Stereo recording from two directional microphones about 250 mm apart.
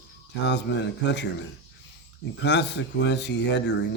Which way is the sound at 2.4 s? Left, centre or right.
Left.